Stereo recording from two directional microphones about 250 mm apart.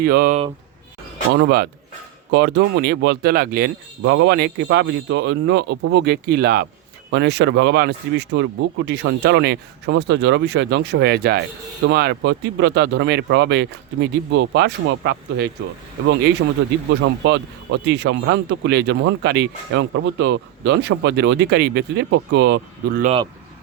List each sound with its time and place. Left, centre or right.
0.0 s speech: right
17.0 s speech: right
23.0 s speech: right